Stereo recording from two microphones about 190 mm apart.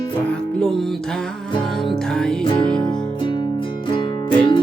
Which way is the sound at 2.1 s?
5° left (ahead or behind).